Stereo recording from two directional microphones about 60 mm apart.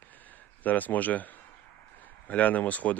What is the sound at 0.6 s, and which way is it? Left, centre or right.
Speech, left.